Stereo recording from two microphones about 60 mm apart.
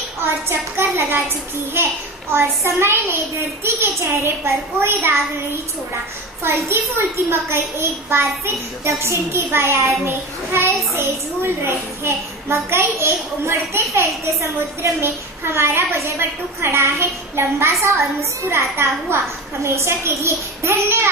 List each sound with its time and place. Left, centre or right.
0.2 s a woman's voice: right
2.3 s a woman's voice: right
6.4 s a woman's voice: right